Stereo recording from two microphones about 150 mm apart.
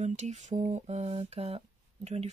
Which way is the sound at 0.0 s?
50° right (ahead or behind).